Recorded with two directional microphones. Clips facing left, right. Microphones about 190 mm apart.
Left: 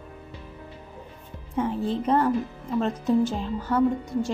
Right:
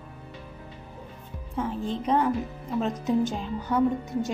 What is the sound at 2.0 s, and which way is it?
A woman's voice, 5° left (ahead or behind).